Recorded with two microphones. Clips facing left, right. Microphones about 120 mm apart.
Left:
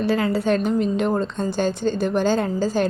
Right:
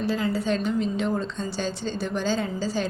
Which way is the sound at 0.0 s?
65° left (ahead or behind).